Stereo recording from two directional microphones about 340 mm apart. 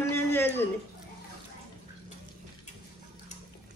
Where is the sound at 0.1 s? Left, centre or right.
Centre.